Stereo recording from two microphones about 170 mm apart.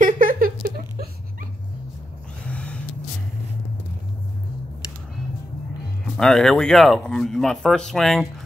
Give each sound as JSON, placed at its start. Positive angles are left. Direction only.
{"t": 0.0, "sound": "a sound", "side_deg": -55}
{"t": 2.4, "sound": "vehicle", "side_deg": 5}
{"t": 6.0, "sound": "speech", "side_deg": 5}